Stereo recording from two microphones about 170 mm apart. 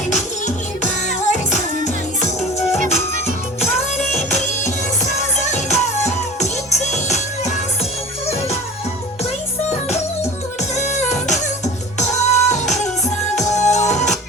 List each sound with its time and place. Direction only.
0.1 s music: 45° left (ahead or behind)
4.1 s music: 40° left (ahead or behind)
10.8 s music: 45° left (ahead or behind)